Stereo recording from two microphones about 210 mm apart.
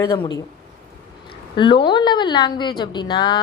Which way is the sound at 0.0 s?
20° left (ahead or behind).